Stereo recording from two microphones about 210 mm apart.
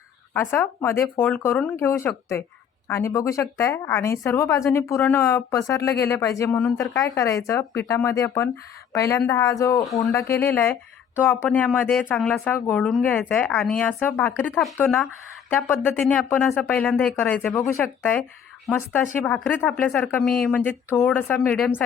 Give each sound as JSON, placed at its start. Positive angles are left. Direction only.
{"t": 0.3, "sound": "a woman's voice", "side_deg": 10}